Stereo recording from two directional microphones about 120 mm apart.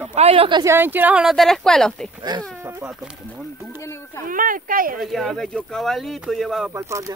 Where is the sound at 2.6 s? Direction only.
20° right (ahead or behind).